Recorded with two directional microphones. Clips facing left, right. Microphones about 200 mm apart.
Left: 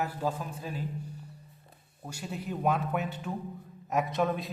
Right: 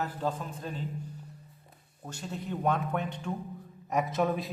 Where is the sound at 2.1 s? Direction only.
10° left (ahead or behind).